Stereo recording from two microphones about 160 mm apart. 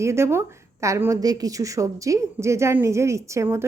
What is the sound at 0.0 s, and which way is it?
A woman's voice, 15° right (ahead or behind).